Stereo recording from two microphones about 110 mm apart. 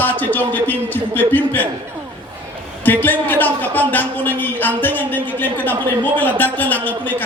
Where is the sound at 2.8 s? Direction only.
15° left (ahead or behind).